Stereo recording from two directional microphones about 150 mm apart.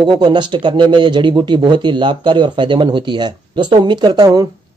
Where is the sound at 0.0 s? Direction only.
30° right (ahead or behind).